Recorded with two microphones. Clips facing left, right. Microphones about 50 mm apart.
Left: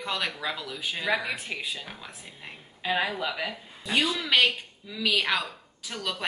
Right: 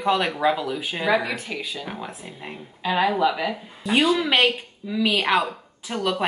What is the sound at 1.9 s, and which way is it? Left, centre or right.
Speech, right.